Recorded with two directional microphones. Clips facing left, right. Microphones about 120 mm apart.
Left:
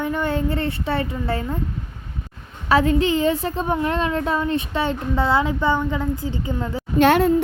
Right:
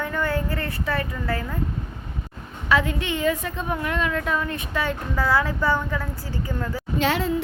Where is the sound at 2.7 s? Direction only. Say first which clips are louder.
Left 6 dB; 35° left (ahead or behind).